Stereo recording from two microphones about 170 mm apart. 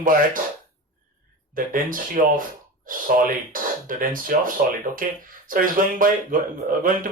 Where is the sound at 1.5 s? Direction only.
55° right (ahead or behind).